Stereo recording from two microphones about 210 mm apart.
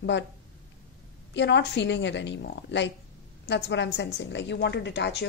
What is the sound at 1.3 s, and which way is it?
A woman's voice, 55° left (ahead or behind).